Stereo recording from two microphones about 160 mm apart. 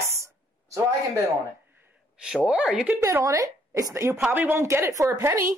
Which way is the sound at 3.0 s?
20° right (ahead or behind).